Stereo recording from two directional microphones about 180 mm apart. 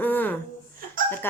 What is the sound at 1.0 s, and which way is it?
Laughter, 50° right (ahead or behind).